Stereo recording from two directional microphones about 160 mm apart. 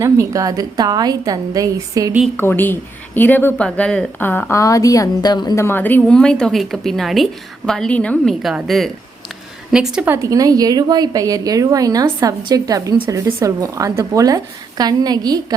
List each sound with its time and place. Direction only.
0.0 s a woman's voice: 20° right (ahead or behind)
2.3 s a woman's voice: 15° left (ahead or behind); by 10.2 s 5° right (ahead or behind)
10.2 s a woman's voice: 20° right (ahead or behind)